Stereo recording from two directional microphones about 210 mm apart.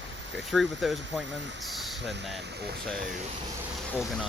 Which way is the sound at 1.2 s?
60° right (ahead or behind).